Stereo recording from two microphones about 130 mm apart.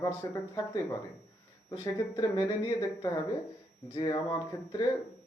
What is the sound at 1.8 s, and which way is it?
Speech, 35° left (ahead or behind).